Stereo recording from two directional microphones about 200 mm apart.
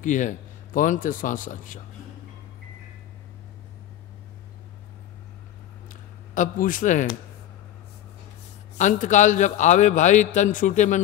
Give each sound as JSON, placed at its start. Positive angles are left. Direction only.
{"t": 0.0, "sound": "a man's voice", "side_deg": 40}
{"t": 6.3, "sound": "a man's voice", "side_deg": 40}
{"t": 8.7, "sound": "a man's voice", "side_deg": 40}